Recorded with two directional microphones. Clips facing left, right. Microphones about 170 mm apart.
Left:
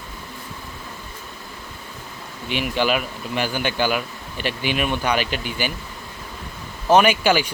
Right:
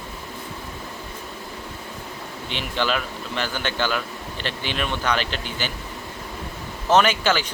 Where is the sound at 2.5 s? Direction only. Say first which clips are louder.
Left 4 dB; 10° left (ahead or behind).